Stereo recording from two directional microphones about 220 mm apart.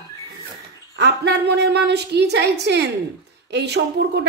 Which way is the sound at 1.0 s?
50° right (ahead or behind).